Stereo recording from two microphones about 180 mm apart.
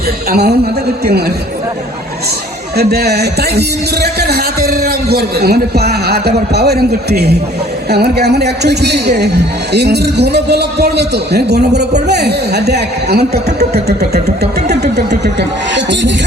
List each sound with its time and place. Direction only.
0.3 s a man's voice: 60° right (ahead or behind)
2.7 s a man's voice: 60° right (ahead or behind)
15.2 s speech: 75° right (ahead or behind)